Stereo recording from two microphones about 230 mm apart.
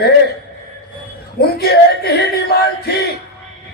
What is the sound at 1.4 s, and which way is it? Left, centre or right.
A man's voice, left.